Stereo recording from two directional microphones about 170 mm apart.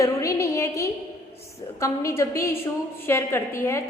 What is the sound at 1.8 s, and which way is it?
A woman's voice, 15° left (ahead or behind).